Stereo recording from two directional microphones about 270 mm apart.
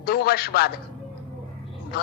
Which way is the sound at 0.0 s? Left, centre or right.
Left.